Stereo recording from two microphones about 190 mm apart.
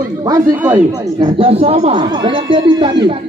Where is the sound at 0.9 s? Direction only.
20° right (ahead or behind).